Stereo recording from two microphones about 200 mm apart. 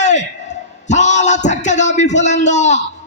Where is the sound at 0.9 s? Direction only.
35° left (ahead or behind).